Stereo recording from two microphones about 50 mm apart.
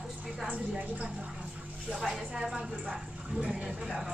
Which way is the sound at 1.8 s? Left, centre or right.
Centre.